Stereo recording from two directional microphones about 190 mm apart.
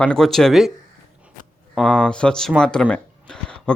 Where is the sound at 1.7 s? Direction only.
Centre (ahead or behind).